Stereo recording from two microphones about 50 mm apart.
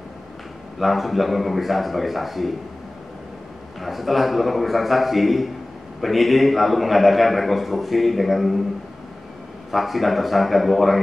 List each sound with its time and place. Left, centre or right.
0.7 s a man's voice: centre
3.8 s a man's voice: centre
9.7 s a man's voice: centre